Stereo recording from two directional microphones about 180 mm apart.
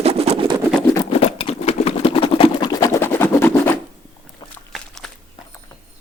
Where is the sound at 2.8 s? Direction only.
15° left (ahead or behind).